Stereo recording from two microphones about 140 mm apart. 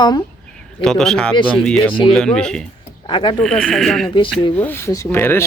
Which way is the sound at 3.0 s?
35° left (ahead or behind).